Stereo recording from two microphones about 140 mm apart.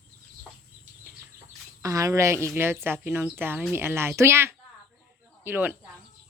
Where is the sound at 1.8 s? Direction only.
25° right (ahead or behind).